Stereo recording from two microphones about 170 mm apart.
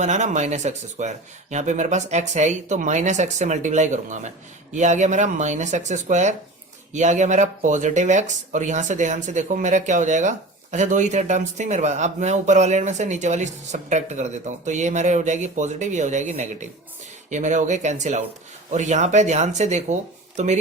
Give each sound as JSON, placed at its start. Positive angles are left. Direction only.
{"t": 0.0, "sound": "speech", "side_deg": -45}